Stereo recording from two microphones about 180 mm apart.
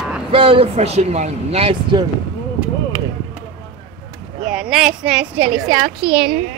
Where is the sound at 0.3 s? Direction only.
30° right (ahead or behind).